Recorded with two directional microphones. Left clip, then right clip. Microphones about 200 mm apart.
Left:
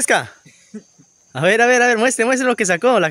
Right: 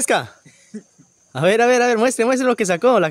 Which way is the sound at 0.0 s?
Centre (ahead or behind).